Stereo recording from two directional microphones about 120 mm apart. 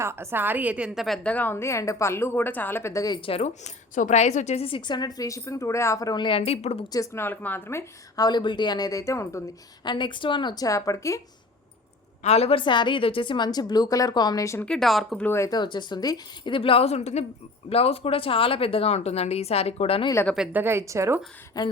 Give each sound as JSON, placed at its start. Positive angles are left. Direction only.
{"t": 0.0, "sound": "a woman's voice", "side_deg": -20}
{"t": 3.2, "sound": "a woman's voice", "side_deg": 55}
{"t": 3.9, "sound": "a woman's voice", "side_deg": 80}
{"t": 6.2, "sound": "a woman's voice", "side_deg": 50}
{"t": 6.9, "sound": "a woman's voice", "side_deg": 25}
{"t": 8.2, "sound": "a woman's voice", "side_deg": 40}
{"t": 9.8, "sound": "a woman's voice", "side_deg": 40}
{"t": 12.2, "sound": "a woman's voice", "side_deg": 60}
{"t": 14.6, "sound": "speech", "side_deg": 5}
{"t": 15.2, "sound": "a woman's voice", "side_deg": 20}
{"t": 15.4, "sound": "a woman's voice", "side_deg": 40}
{"t": 17.7, "sound": "a woman's voice", "side_deg": 55}
{"t": 20.5, "sound": "a woman's voice", "side_deg": -15}
{"t": 21.5, "sound": "a woman's voice", "side_deg": 35}